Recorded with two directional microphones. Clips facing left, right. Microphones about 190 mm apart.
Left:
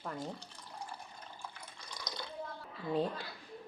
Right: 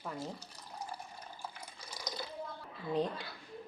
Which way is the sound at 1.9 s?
5° right (ahead or behind).